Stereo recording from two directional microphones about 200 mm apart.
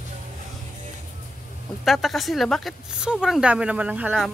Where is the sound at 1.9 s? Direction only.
Centre (ahead or behind).